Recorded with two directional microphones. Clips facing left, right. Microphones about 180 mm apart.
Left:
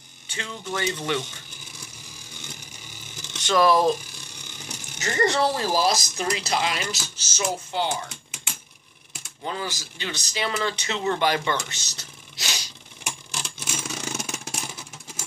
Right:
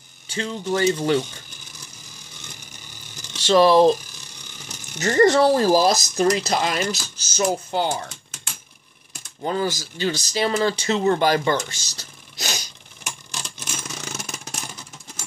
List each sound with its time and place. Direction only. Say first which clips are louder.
0.3 s speech: right 8 dB; 35° right (ahead or behind)
3.3 s speech: right 5 dB; 30° right (ahead or behind)
4.9 s speech: right 7 dB; 40° right (ahead or behind)
9.4 s speech: right 7 dB; 40° right (ahead or behind)
13.0 s a sound: even; 5° left (ahead or behind)